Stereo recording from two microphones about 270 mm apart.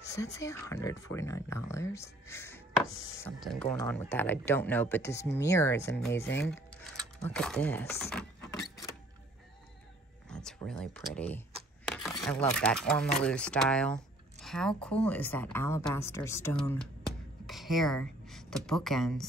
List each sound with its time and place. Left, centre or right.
0.1 s speech: centre
7.2 s speech: centre
10.3 s a sound: centre
12.5 s a woman's voice: centre